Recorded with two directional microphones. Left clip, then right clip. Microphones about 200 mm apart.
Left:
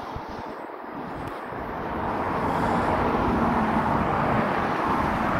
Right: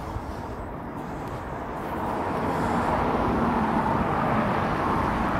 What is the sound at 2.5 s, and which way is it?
Vehicle, 45° left (ahead or behind).